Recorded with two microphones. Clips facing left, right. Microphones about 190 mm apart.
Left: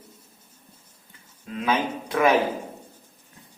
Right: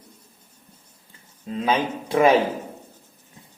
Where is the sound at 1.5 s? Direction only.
30° right (ahead or behind).